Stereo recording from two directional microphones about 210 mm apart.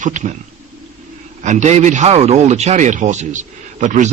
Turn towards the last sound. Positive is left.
turn(degrees=-35)  # may be behind; listen again after turning